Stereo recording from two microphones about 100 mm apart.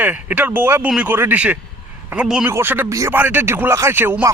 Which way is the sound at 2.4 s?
20° right (ahead or behind).